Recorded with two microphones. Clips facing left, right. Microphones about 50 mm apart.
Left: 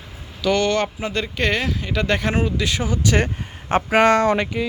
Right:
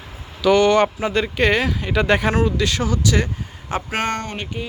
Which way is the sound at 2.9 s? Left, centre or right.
Left.